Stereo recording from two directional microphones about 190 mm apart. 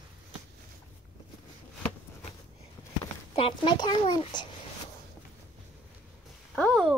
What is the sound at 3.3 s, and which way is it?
A child's voice, 30° left (ahead or behind).